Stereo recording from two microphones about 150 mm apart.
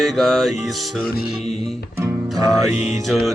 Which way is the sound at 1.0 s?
90° left.